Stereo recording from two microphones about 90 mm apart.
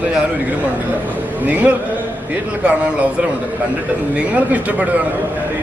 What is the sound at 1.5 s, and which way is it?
Speech, 20° right (ahead or behind).